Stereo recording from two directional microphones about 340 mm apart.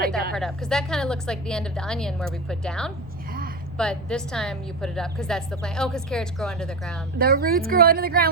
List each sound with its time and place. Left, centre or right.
0.3 s a woman's voice: centre
7.2 s speech: right